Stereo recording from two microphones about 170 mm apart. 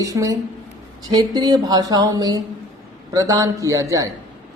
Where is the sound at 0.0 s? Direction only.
20° right (ahead or behind).